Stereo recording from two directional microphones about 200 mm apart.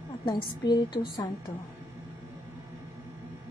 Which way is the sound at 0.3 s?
20° left (ahead or behind).